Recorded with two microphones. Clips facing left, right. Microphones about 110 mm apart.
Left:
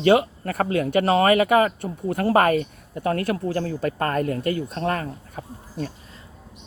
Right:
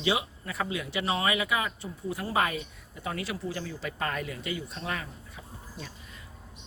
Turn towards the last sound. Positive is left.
turn(degrees=50)  # may be behind; listen again after turning